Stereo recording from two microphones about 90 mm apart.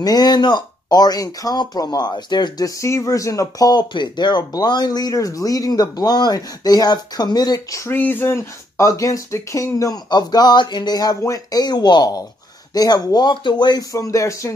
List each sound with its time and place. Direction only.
0.0 s speech: 45° left (ahead or behind)
2.8 s speech: 35° left (ahead or behind)
3.9 s speech: 55° left (ahead or behind)
7.9 s speech: 20° left (ahead or behind)
10.0 s speech: 50° left (ahead or behind)
13.9 s speech: 35° left (ahead or behind)